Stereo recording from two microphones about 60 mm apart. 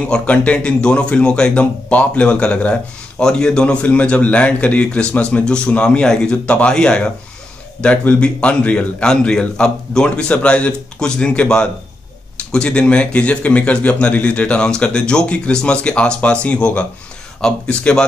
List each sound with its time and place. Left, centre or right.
0.0 s a man's voice: centre